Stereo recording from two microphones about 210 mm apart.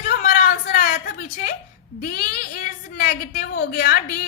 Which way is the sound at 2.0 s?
45° left (ahead or behind).